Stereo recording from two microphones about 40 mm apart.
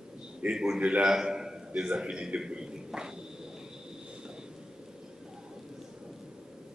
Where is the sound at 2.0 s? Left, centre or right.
Right.